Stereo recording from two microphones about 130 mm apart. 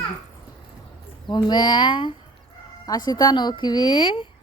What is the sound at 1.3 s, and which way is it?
A woman's voice, 35° left (ahead or behind).